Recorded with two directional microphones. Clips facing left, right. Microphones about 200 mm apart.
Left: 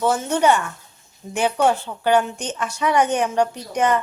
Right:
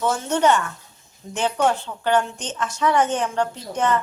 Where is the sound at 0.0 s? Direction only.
10° left (ahead or behind).